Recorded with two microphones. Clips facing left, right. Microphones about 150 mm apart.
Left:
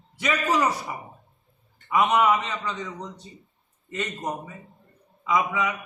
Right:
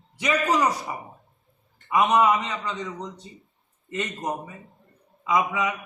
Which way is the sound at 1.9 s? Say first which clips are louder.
Right 1 dB; 15° right (ahead or behind).